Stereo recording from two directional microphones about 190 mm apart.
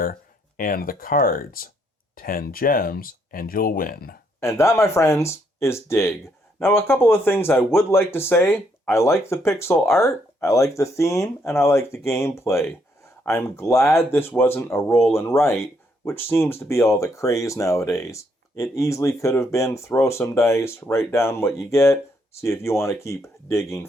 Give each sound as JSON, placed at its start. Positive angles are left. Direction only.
{"t": 0.0, "sound": "speech", "side_deg": 45}
{"t": 4.4, "sound": "speech", "side_deg": 15}